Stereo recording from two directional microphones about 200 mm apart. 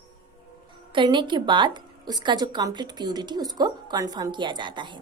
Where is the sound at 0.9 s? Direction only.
25° right (ahead or behind).